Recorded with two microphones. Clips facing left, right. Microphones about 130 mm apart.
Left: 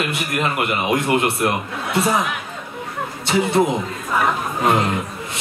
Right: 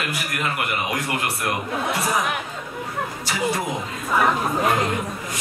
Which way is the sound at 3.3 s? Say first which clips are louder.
Left 13 dB; 25° left (ahead or behind).